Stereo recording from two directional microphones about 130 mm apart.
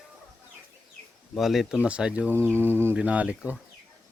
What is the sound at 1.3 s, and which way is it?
Speech, centre (ahead or behind).